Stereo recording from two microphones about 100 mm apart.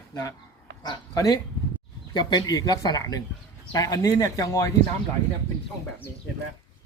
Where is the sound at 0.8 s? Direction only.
45° left (ahead or behind).